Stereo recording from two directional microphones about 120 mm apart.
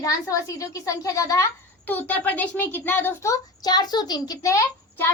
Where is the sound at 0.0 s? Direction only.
30° left (ahead or behind).